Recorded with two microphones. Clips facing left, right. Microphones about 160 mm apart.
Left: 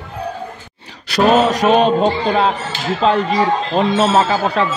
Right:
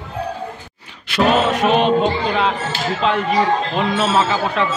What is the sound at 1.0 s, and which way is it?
Speech, 40° left (ahead or behind).